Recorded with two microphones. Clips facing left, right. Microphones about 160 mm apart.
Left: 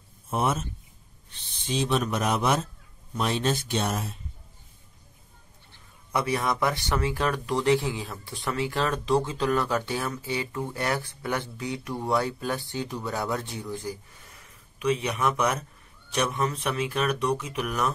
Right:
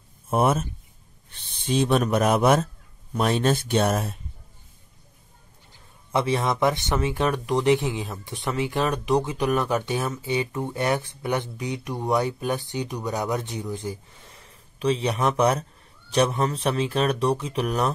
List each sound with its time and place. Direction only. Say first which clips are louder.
0.3 s speech: right 5 dB; 55° right (ahead or behind)
6.1 s speech: right 3 dB; 25° right (ahead or behind)
14.4 s speech: right 3 dB; 30° right (ahead or behind)